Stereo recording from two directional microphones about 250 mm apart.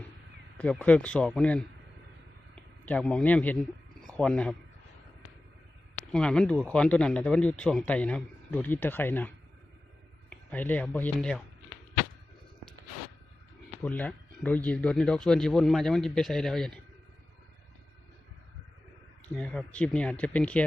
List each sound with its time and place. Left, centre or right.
0.5 s speech: centre
2.8 s speech: centre
6.1 s a man's voice: centre
13.8 s speech: centre
19.2 s speech: centre